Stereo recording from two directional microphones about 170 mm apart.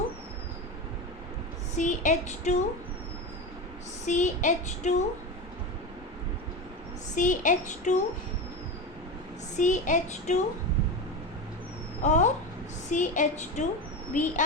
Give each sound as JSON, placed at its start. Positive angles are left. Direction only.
{"t": 1.7, "sound": "child singing", "side_deg": 45}
{"t": 4.0, "sound": "child singing", "side_deg": 45}
{"t": 7.2, "sound": "child singing", "side_deg": 50}
{"t": 9.6, "sound": "child singing", "side_deg": 45}
{"t": 12.0, "sound": "child singing", "side_deg": 45}